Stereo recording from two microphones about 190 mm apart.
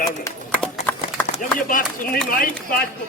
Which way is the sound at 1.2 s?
45° left (ahead or behind).